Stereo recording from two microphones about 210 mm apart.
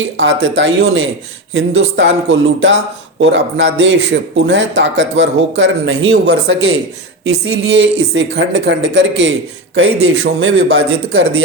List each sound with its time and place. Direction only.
0.2 s speech: 65° right (ahead or behind)
1.5 s speech: 75° right (ahead or behind)
9.7 s speech: 85° right
10.5 s a man's voice: 50° right (ahead or behind)
11.1 s speech: 85° right